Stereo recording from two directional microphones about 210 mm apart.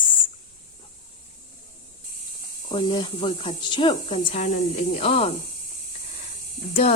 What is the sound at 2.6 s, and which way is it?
Speech, 20° left (ahead or behind).